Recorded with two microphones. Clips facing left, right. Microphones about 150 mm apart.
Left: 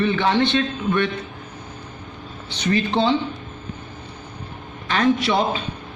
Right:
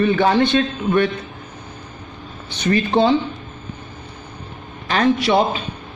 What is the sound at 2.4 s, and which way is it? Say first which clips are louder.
Speech: right 2 dB; 50° right (ahead or behind).